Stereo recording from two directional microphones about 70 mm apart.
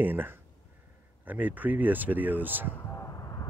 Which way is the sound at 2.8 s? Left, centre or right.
Left.